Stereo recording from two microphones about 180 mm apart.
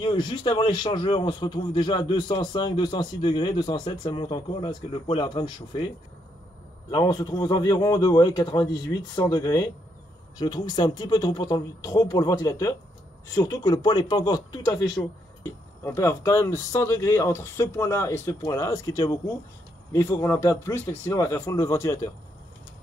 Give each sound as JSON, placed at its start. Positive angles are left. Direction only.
{"t": 0.0, "sound": "a man's voice", "side_deg": 25}
{"t": 6.9, "sound": "a man's voice", "side_deg": 20}